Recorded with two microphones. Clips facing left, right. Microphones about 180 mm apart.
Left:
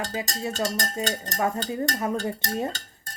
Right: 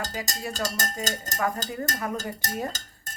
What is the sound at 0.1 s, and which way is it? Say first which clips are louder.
Speech: left 3 dB; 25° left (ahead or behind).